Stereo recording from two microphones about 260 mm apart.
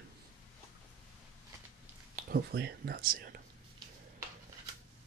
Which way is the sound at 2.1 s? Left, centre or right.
Right.